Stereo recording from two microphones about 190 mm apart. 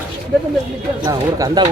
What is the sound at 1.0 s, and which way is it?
Speech, 20° right (ahead or behind).